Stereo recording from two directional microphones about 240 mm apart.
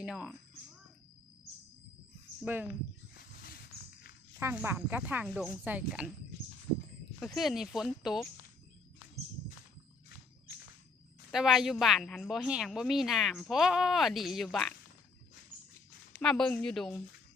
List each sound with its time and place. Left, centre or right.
0.0 s speech: centre
2.4 s speech: centre
3.2 s a sound: left
4.4 s speech: centre
7.3 s a woman's voice: centre
11.3 s a woman's voice: centre
16.2 s a woman's voice: centre